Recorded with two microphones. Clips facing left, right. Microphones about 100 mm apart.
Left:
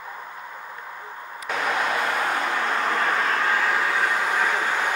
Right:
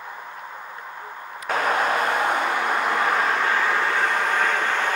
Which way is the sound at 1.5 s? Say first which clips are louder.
Right 3 dB; 45° right (ahead or behind).